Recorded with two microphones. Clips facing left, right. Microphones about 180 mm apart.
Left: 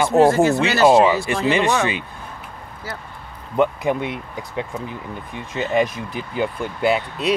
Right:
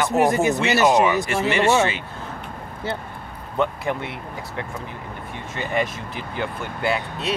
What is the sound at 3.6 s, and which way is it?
Speech, 15° left (ahead or behind).